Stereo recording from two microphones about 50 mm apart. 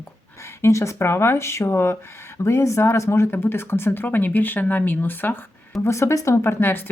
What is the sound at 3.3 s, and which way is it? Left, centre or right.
Speech, left.